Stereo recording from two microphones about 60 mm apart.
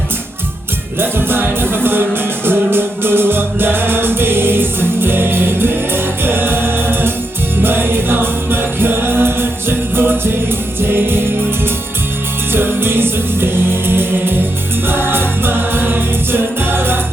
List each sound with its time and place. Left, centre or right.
0.9 s music: right
12.5 s music: right